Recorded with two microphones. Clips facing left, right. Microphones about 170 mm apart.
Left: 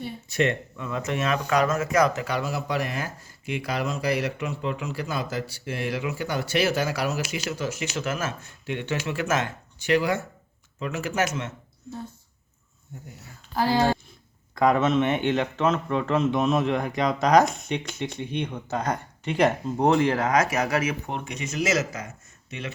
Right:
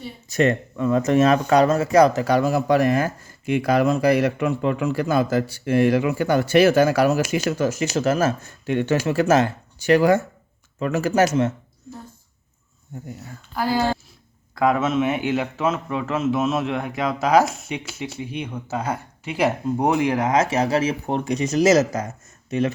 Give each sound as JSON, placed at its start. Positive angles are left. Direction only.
{"t": 0.3, "sound": "speech", "side_deg": -40}
{"t": 14.5, "sound": "a man's voice", "side_deg": -5}